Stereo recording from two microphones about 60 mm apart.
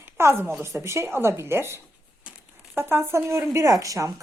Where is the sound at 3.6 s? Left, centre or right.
Right.